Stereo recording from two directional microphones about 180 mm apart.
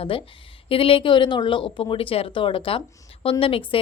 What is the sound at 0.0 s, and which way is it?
A woman's voice, 30° left (ahead or behind).